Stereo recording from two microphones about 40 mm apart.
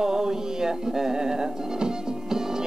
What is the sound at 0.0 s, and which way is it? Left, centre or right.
Music, centre.